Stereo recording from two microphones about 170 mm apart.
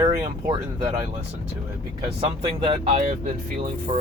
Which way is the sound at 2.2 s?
35° right (ahead or behind).